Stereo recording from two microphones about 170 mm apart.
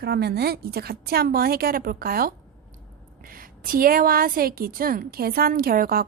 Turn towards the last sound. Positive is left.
turn(degrees=-60)  # may be behind; listen again after turning